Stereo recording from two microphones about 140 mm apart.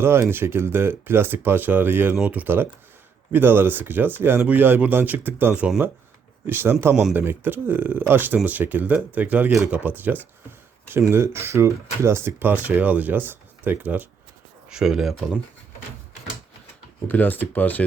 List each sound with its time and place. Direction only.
0.0 s speech: 15° right (ahead or behind)
17.1 s speech: 10° left (ahead or behind)